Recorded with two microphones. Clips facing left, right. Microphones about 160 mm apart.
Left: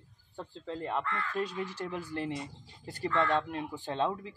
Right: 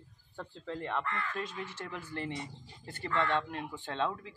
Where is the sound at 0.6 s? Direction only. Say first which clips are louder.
Left 2 dB; 30° left (ahead or behind).